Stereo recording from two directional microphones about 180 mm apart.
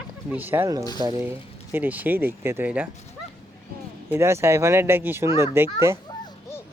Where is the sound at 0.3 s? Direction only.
10° right (ahead or behind).